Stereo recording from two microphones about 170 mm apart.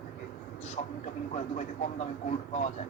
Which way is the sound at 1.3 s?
40° left (ahead or behind).